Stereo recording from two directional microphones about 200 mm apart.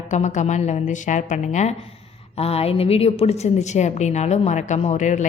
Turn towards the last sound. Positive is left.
turn(degrees=40)  # may be behind; listen again after turning